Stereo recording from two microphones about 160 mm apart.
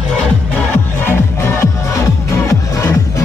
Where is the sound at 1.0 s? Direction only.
15° left (ahead or behind).